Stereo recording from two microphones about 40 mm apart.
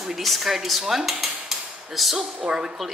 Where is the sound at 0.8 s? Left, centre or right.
Centre.